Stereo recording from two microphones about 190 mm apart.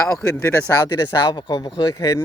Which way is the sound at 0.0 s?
15° left (ahead or behind).